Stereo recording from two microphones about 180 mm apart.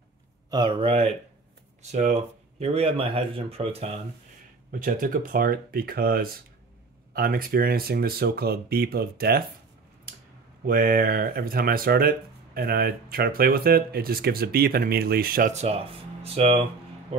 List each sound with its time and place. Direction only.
0.5 s speech: 25° right (ahead or behind)
4.7 s speech: 50° right (ahead or behind)
10.6 s speech: 55° right (ahead or behind)
15.5 s speech: 35° right (ahead or behind)